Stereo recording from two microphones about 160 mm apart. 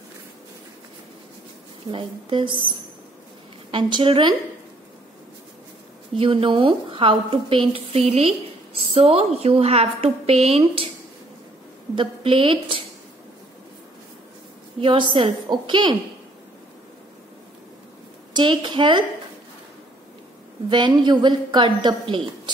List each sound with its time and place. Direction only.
1.9 s a woman's voice: 30° right (ahead or behind)
6.1 s a woman's voice: 35° right (ahead or behind)
11.9 s a woman's voice: 30° right (ahead or behind)
14.8 s a woman's voice: 30° right (ahead or behind)
18.3 s a woman's voice: 30° right (ahead or behind)
20.7 s a woman's voice: 30° right (ahead or behind)